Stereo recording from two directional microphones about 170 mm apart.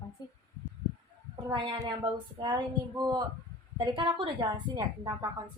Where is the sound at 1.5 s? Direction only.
25° right (ahead or behind).